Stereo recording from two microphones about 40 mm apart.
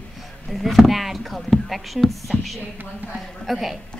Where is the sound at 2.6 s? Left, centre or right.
Right.